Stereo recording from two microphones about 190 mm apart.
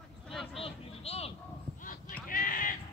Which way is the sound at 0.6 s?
30° left (ahead or behind).